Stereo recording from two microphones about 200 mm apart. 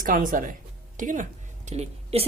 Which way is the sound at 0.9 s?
40° right (ahead or behind).